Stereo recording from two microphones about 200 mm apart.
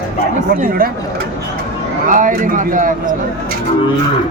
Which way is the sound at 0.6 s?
45° right (ahead or behind).